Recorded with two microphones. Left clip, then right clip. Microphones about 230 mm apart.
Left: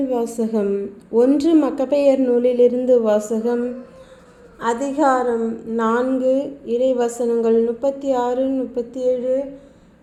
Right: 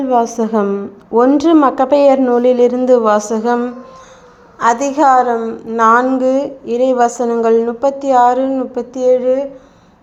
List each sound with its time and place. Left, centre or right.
0.0 s a woman's voice: centre